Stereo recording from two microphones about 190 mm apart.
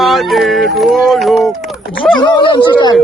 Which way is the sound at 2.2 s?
25° left (ahead or behind).